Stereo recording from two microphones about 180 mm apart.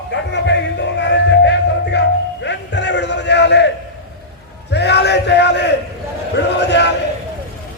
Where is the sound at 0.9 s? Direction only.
80° left.